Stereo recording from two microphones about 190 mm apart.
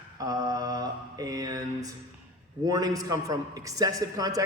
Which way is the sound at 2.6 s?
20° right (ahead or behind).